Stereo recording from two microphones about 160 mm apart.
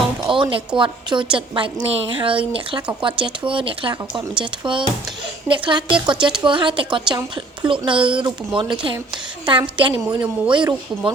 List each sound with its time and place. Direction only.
0.3 s music: 30° right (ahead or behind)
0.8 s a woman's voice: 30° right (ahead or behind)